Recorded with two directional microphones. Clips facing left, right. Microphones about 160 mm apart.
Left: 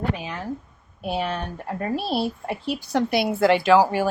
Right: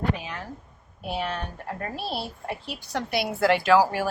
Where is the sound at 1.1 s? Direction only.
10° left (ahead or behind).